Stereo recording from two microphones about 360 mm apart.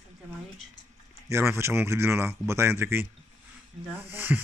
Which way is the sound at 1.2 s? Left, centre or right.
Centre.